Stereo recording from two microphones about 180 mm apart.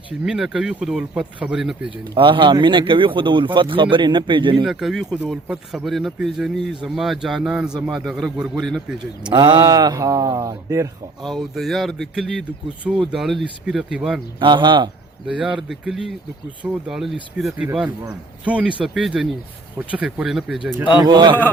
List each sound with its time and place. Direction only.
0.3 s speech: 5° right (ahead or behind)
2.1 s a man's voice: 25° right (ahead or behind)
4.6 s speech: centre (ahead or behind)
9.3 s a man's voice: 25° right (ahead or behind)
11.2 s speech: centre (ahead or behind)
14.3 s a man's voice: 25° right (ahead or behind)
15.5 s speech: 5° right (ahead or behind)
21.0 s a man's voice: 25° right (ahead or behind)